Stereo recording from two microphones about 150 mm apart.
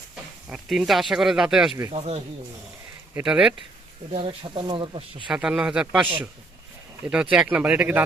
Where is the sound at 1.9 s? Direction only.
40° right (ahead or behind).